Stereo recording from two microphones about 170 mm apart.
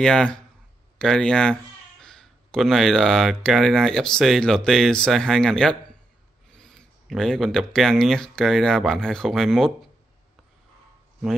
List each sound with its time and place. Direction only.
0.0 s speech: 5° left (ahead or behind)